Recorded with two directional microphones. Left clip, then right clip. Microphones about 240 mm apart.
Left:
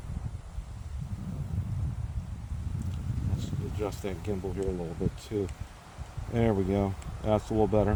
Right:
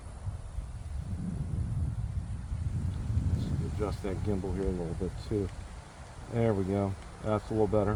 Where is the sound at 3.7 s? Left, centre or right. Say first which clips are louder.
Left 2 dB; left.